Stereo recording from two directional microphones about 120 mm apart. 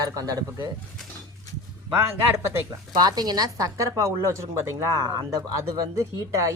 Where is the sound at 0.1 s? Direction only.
30° right (ahead or behind).